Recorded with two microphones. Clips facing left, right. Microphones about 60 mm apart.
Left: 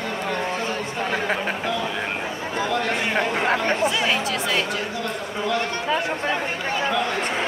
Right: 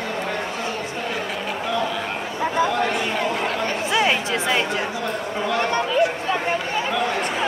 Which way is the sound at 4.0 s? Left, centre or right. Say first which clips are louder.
Right 2 dB; right.